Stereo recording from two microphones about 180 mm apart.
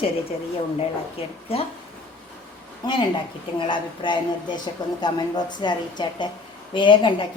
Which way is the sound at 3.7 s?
25° left (ahead or behind).